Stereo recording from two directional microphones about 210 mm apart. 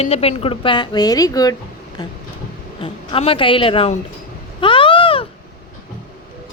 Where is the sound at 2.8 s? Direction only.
25° left (ahead or behind).